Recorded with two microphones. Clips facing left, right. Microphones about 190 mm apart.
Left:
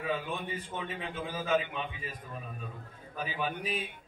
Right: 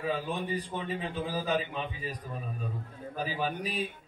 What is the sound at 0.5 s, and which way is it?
A man's voice, 40° right (ahead or behind).